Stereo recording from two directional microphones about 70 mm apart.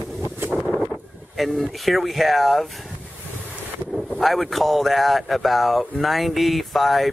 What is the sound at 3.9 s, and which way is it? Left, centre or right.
Speech, centre.